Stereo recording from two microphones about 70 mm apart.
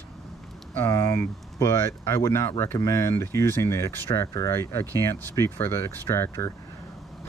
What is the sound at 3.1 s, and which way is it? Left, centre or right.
Speech, left.